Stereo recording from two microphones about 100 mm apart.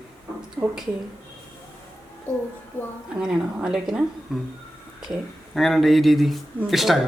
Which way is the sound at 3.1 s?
10° right (ahead or behind).